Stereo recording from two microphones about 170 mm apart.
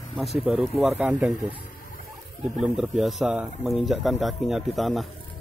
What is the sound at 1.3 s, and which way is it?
Speech, 25° right (ahead or behind).